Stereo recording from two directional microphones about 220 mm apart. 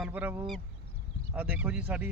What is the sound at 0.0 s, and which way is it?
A man's voice, 10° right (ahead or behind).